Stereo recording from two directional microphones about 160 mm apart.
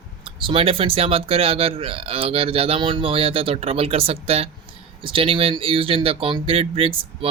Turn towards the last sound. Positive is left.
turn(degrees=-35)  # may be behind; listen again after turning